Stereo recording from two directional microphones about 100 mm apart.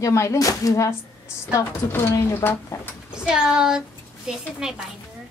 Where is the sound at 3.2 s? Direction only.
5° right (ahead or behind).